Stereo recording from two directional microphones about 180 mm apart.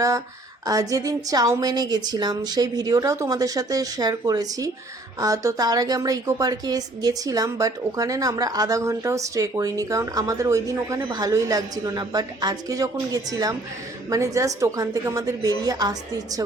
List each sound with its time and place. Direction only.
0.6 s a woman's voice: 20° right (ahead or behind)